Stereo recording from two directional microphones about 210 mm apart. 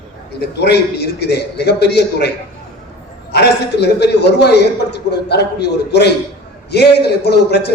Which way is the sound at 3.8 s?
50° left (ahead or behind).